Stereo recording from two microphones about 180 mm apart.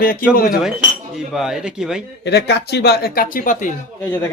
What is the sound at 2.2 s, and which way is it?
Speech, 70° left (ahead or behind).